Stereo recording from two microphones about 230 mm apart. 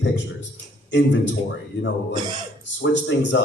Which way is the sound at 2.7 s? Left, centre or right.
Left.